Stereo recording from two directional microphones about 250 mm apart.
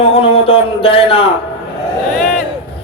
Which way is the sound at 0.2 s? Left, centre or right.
Left.